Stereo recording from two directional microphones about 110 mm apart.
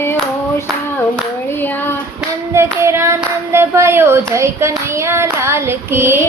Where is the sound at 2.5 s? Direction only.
25° right (ahead or behind).